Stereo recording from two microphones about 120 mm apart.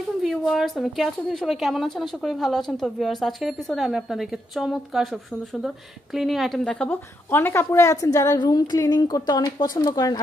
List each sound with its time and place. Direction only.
0.2 s a woman's voice: centre (ahead or behind); by 10.2 s 30° left (ahead or behind)